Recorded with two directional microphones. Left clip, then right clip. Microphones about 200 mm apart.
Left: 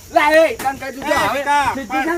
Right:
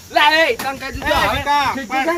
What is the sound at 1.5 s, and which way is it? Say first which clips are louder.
Speech: even; 10° right (ahead or behind).